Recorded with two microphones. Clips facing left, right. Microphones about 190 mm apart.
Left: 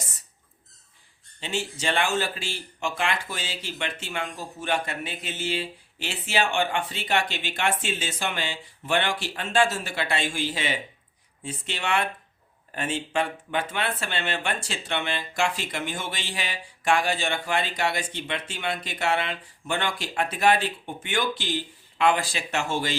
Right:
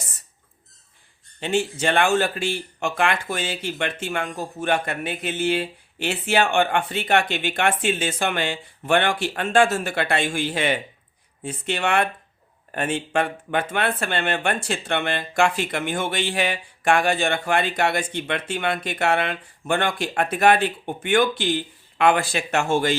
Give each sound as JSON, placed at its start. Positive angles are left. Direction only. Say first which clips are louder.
{"t": 1.4, "sound": "speech", "louder": "right 8 dB", "side_deg": -55}